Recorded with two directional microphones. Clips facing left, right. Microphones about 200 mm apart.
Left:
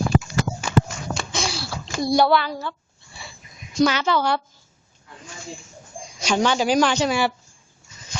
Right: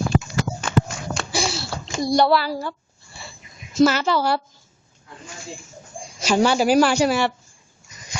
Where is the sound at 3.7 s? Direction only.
5° right (ahead or behind).